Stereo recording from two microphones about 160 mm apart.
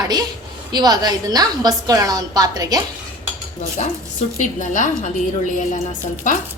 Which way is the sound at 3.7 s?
45° left (ahead or behind).